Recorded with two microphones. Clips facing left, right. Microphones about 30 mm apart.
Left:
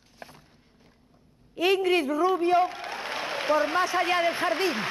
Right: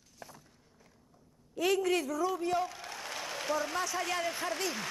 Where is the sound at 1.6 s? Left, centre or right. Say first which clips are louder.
Left 6 dB; left.